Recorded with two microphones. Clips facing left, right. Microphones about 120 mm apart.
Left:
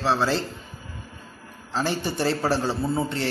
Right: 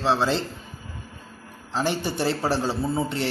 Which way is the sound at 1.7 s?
15° right (ahead or behind).